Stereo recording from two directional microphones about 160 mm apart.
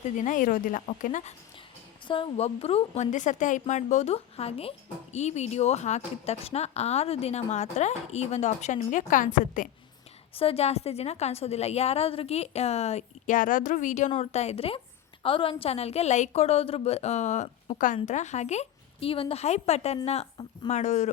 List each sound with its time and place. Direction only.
0.2 s speech: 55° left (ahead or behind)
2.0 s a woman's voice: 30° left (ahead or behind); by 9.6 s 55° left (ahead or behind)
10.3 s a woman's voice: 35° left (ahead or behind)